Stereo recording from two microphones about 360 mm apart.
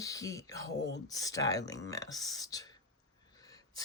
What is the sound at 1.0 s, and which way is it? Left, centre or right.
A woman's voice, centre.